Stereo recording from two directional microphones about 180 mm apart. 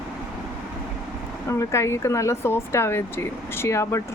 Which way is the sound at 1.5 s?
15° left (ahead or behind).